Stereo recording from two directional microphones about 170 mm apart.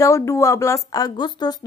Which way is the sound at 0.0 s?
20° left (ahead or behind).